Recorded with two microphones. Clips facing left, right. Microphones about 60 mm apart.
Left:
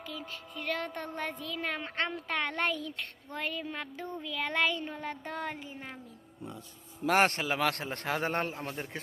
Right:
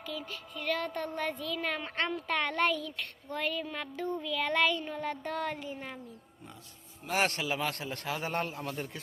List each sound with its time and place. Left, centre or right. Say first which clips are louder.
0.0 s speech: right 2 dB; left
7.1 s a man's voice: left 4 dB; left
7.5 s a man's voice: left 3 dB; left